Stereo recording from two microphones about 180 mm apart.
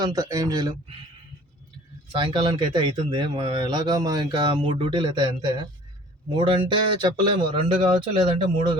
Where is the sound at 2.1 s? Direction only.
30° right (ahead or behind).